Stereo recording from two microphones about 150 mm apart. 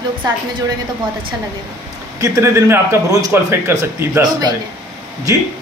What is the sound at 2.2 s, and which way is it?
A man's voice, 20° right (ahead or behind).